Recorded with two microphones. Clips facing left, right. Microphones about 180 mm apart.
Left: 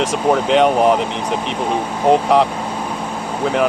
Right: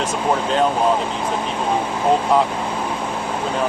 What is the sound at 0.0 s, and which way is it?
Speech, 75° left (ahead or behind).